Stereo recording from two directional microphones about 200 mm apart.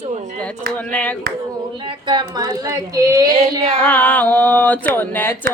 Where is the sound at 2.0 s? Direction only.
20° right (ahead or behind).